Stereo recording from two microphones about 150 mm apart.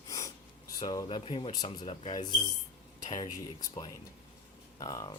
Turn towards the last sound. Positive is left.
turn(degrees=25)  # may be behind; listen again after turning